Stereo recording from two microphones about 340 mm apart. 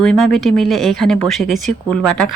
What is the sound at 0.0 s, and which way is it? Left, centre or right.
Speech, centre.